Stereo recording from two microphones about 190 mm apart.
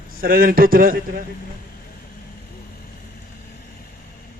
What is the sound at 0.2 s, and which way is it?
A man's voice, 50° right (ahead or behind).